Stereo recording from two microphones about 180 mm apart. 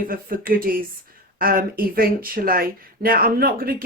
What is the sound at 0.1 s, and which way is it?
Speech, 55° right (ahead or behind).